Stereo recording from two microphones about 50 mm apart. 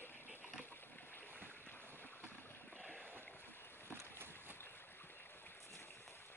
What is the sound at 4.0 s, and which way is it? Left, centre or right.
Boat, right.